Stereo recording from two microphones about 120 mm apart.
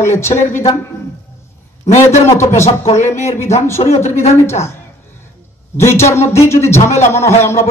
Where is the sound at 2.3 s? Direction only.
25° left (ahead or behind).